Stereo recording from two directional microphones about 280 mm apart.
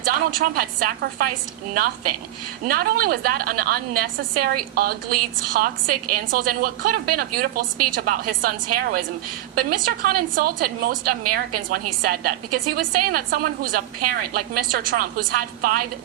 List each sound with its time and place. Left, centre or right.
0.0 s a woman's voice: right